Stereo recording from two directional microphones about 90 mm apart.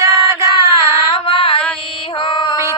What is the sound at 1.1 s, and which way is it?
Mantra, 90° left.